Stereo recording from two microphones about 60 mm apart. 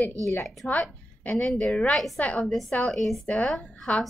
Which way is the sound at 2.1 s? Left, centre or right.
Left.